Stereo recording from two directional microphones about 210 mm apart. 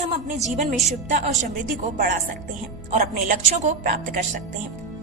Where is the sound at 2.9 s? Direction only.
35° right (ahead or behind).